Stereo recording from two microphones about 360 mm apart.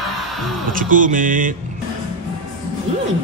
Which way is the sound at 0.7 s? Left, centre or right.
Right.